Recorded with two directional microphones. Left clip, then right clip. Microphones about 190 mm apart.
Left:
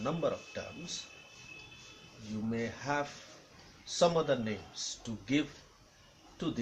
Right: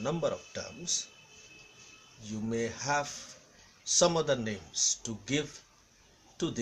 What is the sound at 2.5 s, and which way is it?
Speech, 50° right (ahead or behind).